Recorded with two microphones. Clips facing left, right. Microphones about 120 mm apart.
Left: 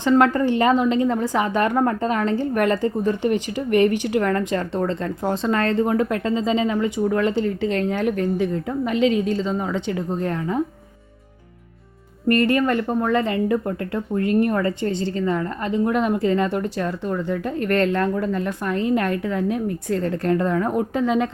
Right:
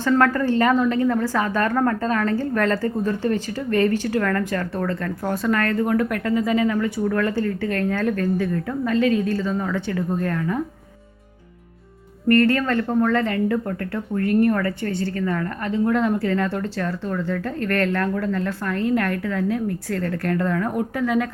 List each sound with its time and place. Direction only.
0.0 s a woman's voice: 20° left (ahead or behind)
12.3 s a woman's voice: 15° left (ahead or behind)